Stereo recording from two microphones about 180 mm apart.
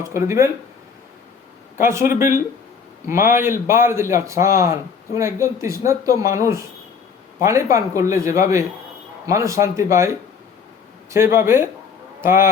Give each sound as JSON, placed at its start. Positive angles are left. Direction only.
{"t": 0.0, "sound": "a man's voice", "side_deg": -15}
{"t": 1.8, "sound": "a man's voice", "side_deg": -15}
{"t": 6.1, "sound": "speech", "side_deg": 45}
{"t": 6.4, "sound": "a man's voice", "side_deg": -15}
{"t": 11.1, "sound": "a man's voice", "side_deg": -15}